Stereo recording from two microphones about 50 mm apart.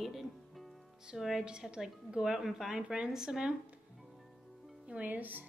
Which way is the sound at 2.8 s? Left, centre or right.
Right.